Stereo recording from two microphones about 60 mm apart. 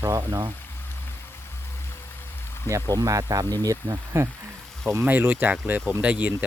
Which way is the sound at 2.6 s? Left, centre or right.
Right.